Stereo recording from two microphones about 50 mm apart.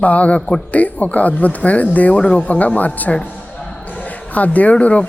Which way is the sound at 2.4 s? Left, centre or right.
Left.